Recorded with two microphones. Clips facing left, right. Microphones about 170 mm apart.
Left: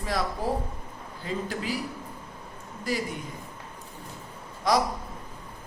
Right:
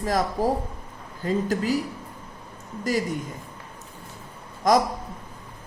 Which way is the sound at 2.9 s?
45° right (ahead or behind).